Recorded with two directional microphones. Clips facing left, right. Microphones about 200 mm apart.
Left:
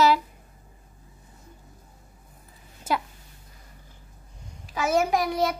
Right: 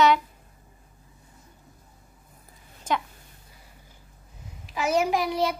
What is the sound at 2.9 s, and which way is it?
Speech, 5° left (ahead or behind).